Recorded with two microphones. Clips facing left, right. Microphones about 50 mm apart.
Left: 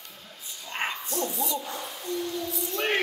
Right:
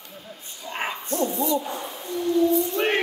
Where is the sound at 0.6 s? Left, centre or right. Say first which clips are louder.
Right 2 dB; centre.